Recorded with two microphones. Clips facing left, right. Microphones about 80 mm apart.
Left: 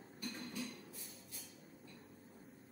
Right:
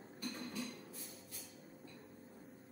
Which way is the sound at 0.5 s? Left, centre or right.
Centre.